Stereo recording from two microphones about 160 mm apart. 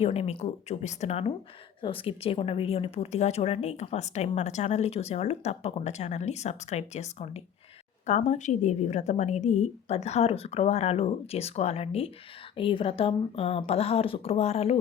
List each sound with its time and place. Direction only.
0.0 s a woman's voice: 40° left (ahead or behind)